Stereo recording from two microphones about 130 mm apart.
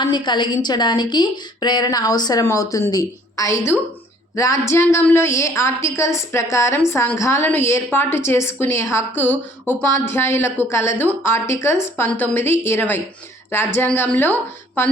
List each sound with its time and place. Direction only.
0.0 s a woman's voice: 35° left (ahead or behind); by 14.3 s 15° left (ahead or behind)